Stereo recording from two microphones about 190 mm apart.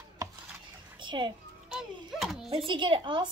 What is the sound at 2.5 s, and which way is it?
Speech, 25° right (ahead or behind).